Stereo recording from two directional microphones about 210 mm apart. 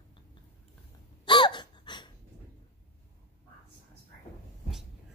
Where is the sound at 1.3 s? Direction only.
20° left (ahead or behind).